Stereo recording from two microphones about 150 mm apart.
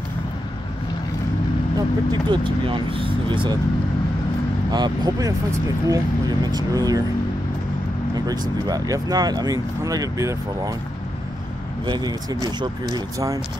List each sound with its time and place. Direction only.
1.8 s speech: 30° right (ahead or behind)
4.6 s speech: 30° right (ahead or behind)
8.3 s speech: 25° right (ahead or behind)
11.8 s speech: 30° right (ahead or behind)